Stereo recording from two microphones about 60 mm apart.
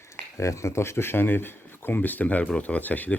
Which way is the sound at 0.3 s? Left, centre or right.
Left.